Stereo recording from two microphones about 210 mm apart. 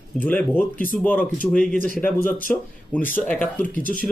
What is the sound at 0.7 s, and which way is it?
Speech, 40° left (ahead or behind).